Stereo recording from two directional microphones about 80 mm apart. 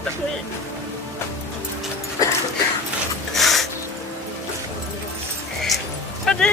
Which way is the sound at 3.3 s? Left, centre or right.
Centre.